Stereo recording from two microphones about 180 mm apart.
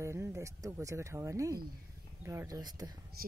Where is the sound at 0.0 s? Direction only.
15° right (ahead or behind).